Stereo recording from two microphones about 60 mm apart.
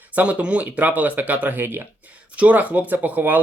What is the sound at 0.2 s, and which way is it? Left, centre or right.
Speech, right.